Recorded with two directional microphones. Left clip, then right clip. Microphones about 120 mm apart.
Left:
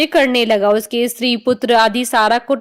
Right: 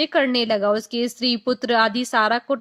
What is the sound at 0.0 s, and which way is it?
A woman's voice, 40° left (ahead or behind).